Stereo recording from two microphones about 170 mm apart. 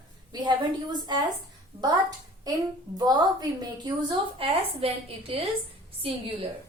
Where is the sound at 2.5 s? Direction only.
20° right (ahead or behind).